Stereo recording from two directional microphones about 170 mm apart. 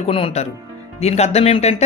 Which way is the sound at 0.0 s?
35° left (ahead or behind).